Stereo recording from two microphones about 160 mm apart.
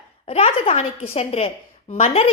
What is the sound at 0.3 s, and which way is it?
A woman's voice, 40° left (ahead or behind).